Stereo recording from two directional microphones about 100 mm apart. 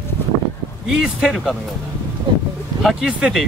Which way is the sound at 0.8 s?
5° right (ahead or behind).